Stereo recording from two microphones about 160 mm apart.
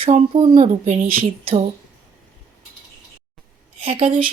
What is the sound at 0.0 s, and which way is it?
Speech, 35° right (ahead or behind).